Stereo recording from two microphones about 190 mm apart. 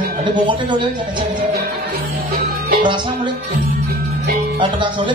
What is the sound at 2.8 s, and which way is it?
Speech, 25° right (ahead or behind).